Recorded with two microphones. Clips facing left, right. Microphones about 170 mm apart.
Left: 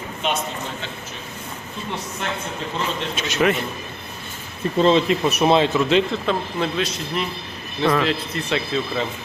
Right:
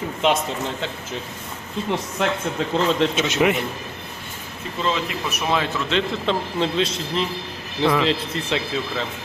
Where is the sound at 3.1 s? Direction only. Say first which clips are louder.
Right 1 dB; 20° right (ahead or behind).